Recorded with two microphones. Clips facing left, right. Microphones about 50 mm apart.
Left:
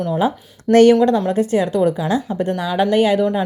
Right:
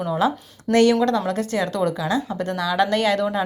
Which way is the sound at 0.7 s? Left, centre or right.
Left.